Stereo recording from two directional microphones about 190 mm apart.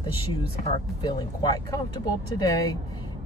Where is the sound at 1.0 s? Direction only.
20° left (ahead or behind).